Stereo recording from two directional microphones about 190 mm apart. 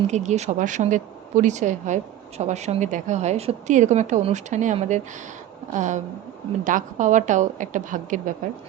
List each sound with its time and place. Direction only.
0.1 s a woman's voice: 35° right (ahead or behind)